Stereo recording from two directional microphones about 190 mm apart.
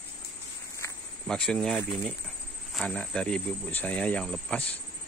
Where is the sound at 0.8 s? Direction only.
15° left (ahead or behind).